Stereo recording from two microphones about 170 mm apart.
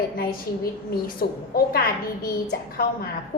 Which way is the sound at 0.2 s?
60° left (ahead or behind).